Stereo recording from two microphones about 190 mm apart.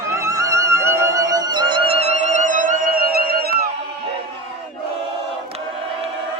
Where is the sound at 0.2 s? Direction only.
15° right (ahead or behind).